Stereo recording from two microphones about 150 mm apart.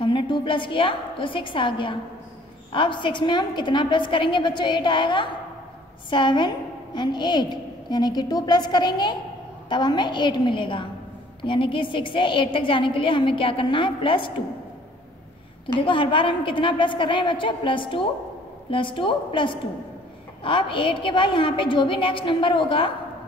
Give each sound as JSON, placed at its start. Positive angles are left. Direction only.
{"t": 0.0, "sound": "a woman's voice", "side_deg": 35}
{"t": 15.6, "sound": "a woman's voice", "side_deg": 35}